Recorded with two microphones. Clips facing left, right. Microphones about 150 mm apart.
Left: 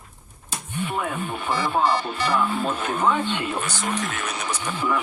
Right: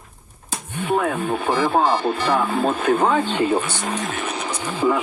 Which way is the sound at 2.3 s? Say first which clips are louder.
Right 2 dB; 50° right (ahead or behind).